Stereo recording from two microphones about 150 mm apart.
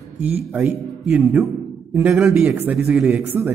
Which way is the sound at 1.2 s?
10° right (ahead or behind).